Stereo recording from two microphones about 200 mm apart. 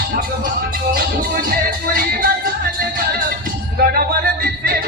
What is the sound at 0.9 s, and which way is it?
Music, 50° right (ahead or behind).